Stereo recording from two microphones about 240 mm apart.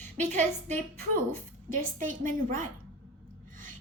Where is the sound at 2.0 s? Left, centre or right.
Right.